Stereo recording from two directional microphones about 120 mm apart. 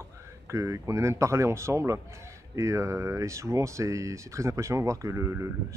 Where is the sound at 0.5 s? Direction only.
25° right (ahead or behind).